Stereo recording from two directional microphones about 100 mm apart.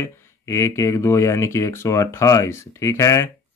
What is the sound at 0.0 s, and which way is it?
Speech, 30° left (ahead or behind).